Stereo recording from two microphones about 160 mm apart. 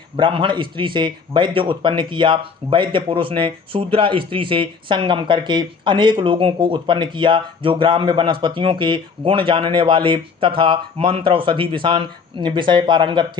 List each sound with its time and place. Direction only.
0.2 s a man's voice: 30° right (ahead or behind)